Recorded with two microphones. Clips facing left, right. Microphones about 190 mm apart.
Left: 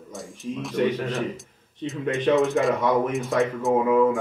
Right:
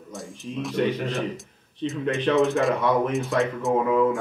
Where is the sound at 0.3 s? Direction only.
15° left (ahead or behind).